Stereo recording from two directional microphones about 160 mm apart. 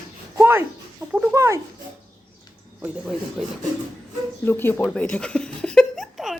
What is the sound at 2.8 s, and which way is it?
Speech, centre (ahead or behind).